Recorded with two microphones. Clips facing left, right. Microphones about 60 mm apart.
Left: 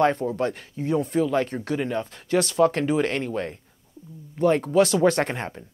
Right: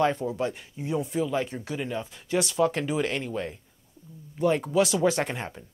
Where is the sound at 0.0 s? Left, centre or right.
Left.